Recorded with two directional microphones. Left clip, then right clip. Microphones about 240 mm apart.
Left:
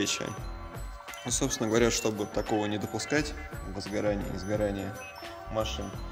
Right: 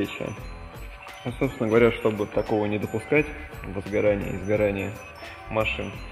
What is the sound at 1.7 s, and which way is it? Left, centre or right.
A man's voice, centre.